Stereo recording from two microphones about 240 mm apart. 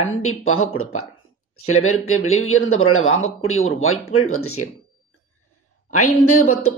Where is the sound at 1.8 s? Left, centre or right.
Left.